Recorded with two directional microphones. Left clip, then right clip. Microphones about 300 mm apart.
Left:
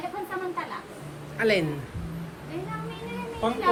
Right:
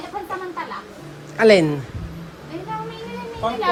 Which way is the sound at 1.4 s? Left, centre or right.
Centre.